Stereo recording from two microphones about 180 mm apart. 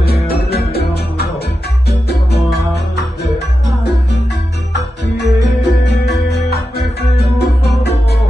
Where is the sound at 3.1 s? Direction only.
70° left (ahead or behind).